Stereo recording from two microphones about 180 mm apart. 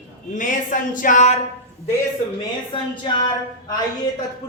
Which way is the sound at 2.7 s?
25° left (ahead or behind).